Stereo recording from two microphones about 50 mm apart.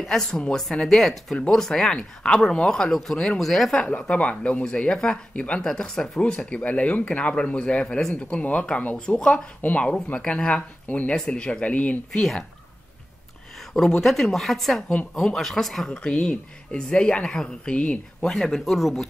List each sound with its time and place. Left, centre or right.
0.1 s speech: centre
4.1 s speech: left
5.6 s speech: centre
6.6 s speech: left
8.9 s speech: centre
9.6 s speech: left
11.1 s speech: centre
11.6 s speech: left
12.1 s speech: centre
14.0 s speech: centre
15.9 s speech: centre
18.6 s speech: centre